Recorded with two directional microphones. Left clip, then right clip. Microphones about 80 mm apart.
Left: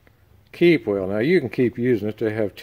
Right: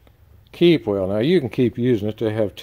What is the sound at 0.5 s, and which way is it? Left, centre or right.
Speech, right.